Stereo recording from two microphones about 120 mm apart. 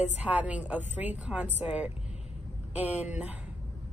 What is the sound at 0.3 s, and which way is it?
A woman's voice, 10° right (ahead or behind).